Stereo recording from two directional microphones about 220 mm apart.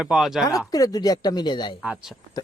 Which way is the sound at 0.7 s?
15° left (ahead or behind).